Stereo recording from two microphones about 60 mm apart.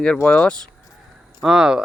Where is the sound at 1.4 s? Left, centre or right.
Centre.